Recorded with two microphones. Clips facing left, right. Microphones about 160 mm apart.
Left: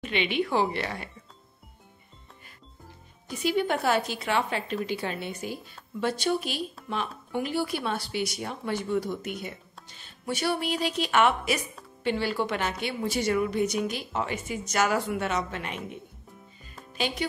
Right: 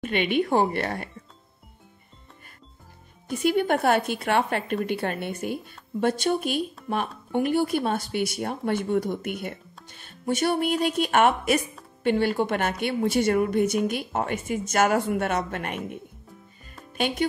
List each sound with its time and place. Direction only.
0.0 s speech: 50° right (ahead or behind)
3.3 s speech: 50° right (ahead or behind)